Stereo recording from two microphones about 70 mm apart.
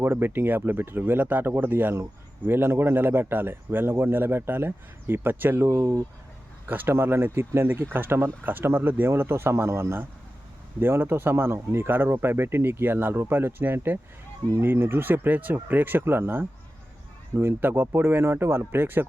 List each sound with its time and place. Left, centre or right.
0.0 s speech: right
5.6 s speech: right
6.7 s speech: right